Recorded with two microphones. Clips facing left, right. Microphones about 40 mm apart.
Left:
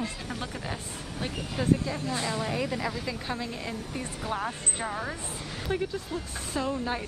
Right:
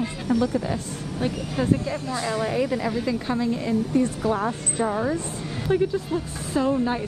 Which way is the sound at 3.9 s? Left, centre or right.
Centre.